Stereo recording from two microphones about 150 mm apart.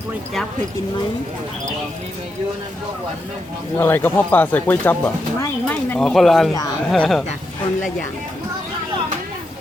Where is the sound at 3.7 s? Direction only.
15° left (ahead or behind).